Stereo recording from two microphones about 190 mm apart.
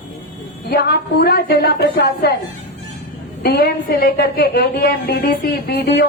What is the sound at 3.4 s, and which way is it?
A woman's voice, 50° left (ahead or behind).